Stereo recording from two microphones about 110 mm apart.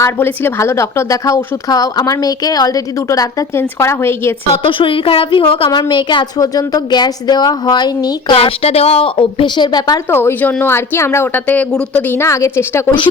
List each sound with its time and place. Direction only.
0.0 s a woman's voice: 20° left (ahead or behind)
4.6 s a woman's voice: 55° left (ahead or behind)
8.4 s speech: 65° left (ahead or behind); by 10.0 s 40° left (ahead or behind)
10.1 s speech: 20° left (ahead or behind)